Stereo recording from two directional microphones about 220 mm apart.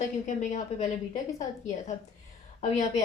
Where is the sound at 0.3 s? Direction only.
30° left (ahead or behind).